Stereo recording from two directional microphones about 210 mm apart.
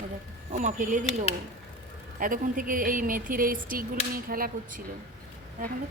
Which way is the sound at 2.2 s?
40° right (ahead or behind).